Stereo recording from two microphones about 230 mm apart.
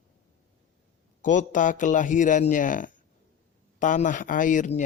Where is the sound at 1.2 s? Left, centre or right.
Left.